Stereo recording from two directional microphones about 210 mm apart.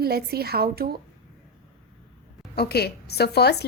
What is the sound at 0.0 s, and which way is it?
Speech, 50° right (ahead or behind).